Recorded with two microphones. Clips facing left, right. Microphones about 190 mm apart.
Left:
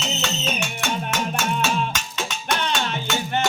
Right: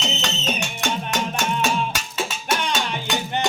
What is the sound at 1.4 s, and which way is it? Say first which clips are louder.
Music: right 1 dB; 10° right (ahead or behind).